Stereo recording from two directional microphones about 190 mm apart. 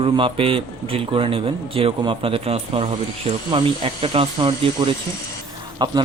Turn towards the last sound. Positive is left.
turn(degrees=-20)  # may be behind; listen again after turning